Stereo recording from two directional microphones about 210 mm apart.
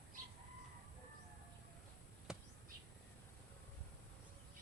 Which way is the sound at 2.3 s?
5° right (ahead or behind).